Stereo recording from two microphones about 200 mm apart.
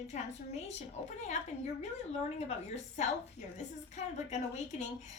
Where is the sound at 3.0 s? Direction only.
35° left (ahead or behind).